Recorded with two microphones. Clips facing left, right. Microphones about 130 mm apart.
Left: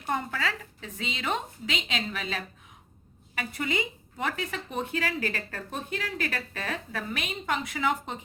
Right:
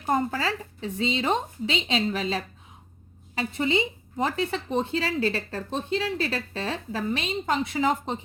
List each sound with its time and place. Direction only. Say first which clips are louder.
0.0 s speech: right 5 dB; 40° right (ahead or behind)